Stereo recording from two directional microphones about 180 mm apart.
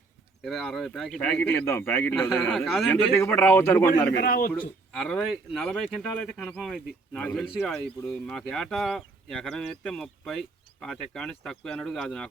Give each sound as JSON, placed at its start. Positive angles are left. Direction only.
{"t": 0.4, "sound": "speech", "side_deg": 5}
{"t": 2.9, "sound": "speech", "side_deg": 15}
{"t": 3.9, "sound": "a man's voice", "side_deg": 55}
{"t": 4.6, "sound": "speech", "side_deg": 5}